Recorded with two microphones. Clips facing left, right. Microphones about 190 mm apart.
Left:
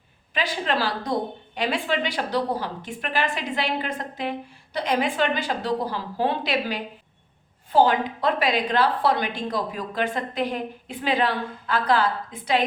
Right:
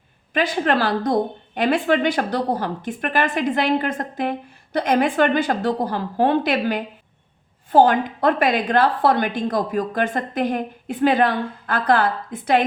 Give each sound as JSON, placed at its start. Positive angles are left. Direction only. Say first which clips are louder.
{"t": 0.3, "sound": "speech", "louder": "right 6 dB", "side_deg": -50}